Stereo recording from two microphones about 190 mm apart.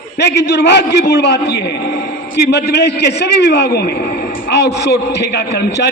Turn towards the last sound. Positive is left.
turn(degrees=60)  # may be behind; listen again after turning